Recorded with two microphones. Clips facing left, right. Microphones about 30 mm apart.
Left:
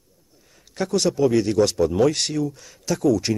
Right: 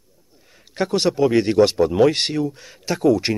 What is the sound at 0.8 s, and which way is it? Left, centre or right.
Speech, right.